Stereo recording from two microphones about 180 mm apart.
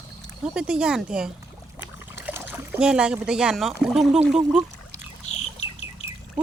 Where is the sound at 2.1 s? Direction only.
10° right (ahead or behind).